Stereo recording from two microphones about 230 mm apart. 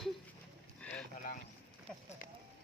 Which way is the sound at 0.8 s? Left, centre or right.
Centre.